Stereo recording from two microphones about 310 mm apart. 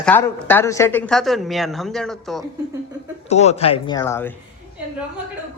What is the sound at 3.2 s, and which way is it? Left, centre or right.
Speech, left.